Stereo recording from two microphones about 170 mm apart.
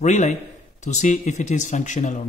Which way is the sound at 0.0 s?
45° left (ahead or behind).